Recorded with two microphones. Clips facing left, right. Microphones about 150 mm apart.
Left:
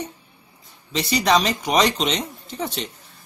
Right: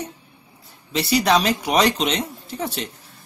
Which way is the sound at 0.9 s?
10° right (ahead or behind).